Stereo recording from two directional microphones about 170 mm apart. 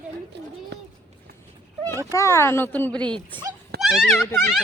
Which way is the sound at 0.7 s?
85° right.